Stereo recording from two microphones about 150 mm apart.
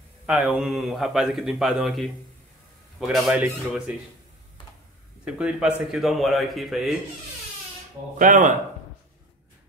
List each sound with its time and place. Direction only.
0.3 s speech: 5° right (ahead or behind)
5.2 s speech: 5° right (ahead or behind)
8.2 s speech: 60° right (ahead or behind)